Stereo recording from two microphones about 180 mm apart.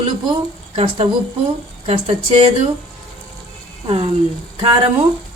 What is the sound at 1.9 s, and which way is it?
Speech, 30° right (ahead or behind).